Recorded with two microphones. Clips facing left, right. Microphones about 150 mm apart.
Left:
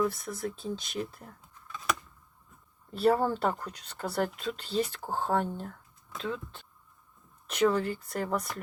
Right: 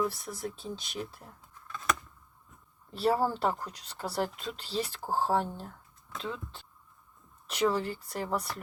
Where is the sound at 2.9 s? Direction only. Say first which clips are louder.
Left 3 dB; 55° left (ahead or behind).